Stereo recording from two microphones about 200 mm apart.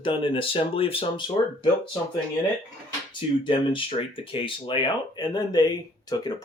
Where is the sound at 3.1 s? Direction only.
25° left (ahead or behind).